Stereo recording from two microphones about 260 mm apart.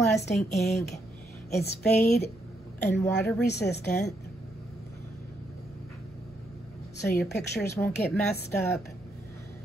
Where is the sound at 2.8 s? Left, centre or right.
Centre.